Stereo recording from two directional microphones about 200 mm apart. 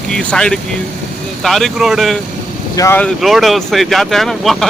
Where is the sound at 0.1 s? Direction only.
5° left (ahead or behind).